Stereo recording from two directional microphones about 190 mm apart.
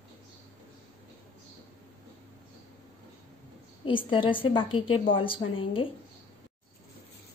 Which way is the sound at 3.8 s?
25° left (ahead or behind).